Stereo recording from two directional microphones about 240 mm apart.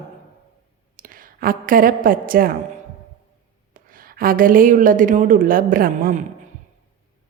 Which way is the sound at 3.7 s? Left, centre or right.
Right.